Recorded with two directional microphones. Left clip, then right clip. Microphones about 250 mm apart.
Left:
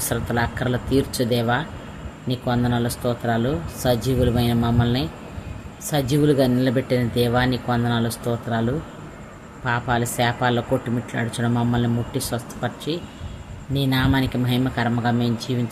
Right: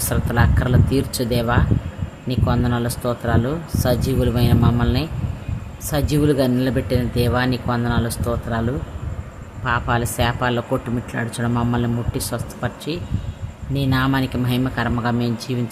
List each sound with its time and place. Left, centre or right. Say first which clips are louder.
0.0 s speech: right 2 dB; centre
9.6 s speech: right 2 dB; centre